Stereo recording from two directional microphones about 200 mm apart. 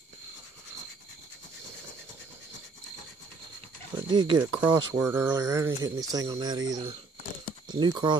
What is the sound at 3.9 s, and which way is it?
Speech, 20° right (ahead or behind).